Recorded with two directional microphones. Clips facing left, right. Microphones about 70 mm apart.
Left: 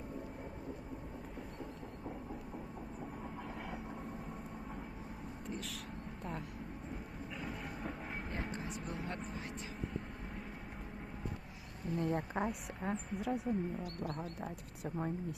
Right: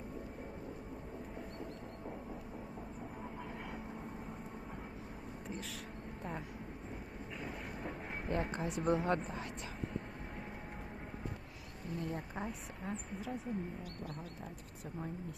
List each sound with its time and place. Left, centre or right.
8.3 s speech: right
11.9 s speech: left
12.5 s a woman's voice: left